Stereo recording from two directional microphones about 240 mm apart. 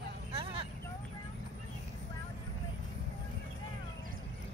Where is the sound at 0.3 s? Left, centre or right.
Right.